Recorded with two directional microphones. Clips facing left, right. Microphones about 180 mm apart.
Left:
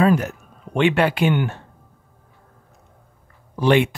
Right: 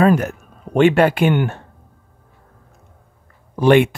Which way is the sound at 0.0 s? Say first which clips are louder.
Right 3 dB; 50° right (ahead or behind).